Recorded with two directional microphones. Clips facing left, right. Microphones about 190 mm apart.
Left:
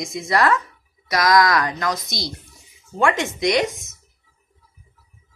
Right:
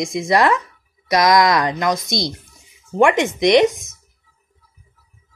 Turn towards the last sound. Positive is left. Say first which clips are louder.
# right 7 dB
turn(degrees=-20)  # may be behind; listen again after turning